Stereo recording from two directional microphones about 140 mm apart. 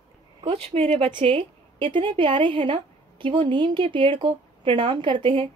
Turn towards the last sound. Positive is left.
turn(degrees=-35)  # may be behind; listen again after turning